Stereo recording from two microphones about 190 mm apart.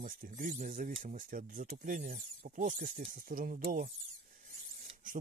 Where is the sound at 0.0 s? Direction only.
45° right (ahead or behind).